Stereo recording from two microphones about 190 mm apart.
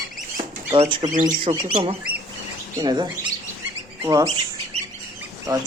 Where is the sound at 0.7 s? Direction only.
25° right (ahead or behind).